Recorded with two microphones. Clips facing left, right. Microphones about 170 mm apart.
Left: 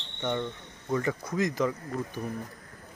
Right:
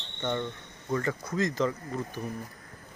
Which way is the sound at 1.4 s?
15° left (ahead or behind).